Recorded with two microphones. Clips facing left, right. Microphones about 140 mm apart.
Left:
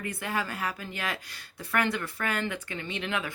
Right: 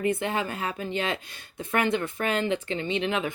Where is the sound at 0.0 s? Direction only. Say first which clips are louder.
Right 6 dB; 25° right (ahead or behind).